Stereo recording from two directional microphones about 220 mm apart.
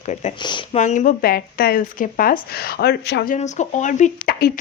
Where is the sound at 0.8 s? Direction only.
35° left (ahead or behind); by 3.4 s 50° left (ahead or behind).